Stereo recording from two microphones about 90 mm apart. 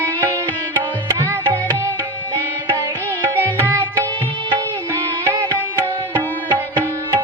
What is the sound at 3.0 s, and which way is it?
Music, 20° left (ahead or behind).